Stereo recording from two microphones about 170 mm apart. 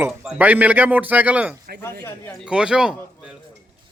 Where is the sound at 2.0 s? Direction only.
15° left (ahead or behind).